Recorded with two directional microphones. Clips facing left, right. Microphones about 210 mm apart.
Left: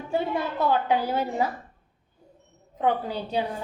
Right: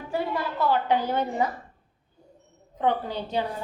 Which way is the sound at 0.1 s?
20° left (ahead or behind).